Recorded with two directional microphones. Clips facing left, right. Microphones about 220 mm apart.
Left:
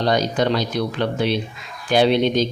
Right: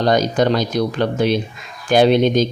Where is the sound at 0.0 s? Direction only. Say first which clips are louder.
Right 3 dB; 45° right (ahead or behind).